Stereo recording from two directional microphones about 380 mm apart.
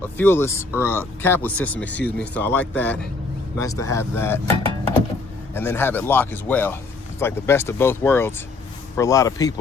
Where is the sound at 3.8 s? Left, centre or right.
Left.